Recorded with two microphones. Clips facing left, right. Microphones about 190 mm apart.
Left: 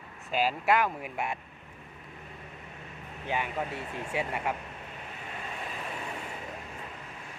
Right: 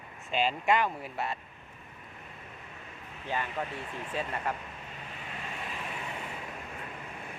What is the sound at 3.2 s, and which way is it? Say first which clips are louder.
Speech: left 2 dB; 15° left (ahead or behind).